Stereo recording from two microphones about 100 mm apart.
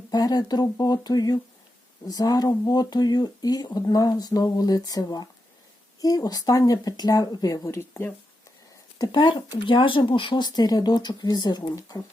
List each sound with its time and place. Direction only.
0.1 s speech: 40° left (ahead or behind); by 8.1 s 25° left (ahead or behind)
9.1 s speech: 55° left (ahead or behind); by 12.0 s 35° left (ahead or behind)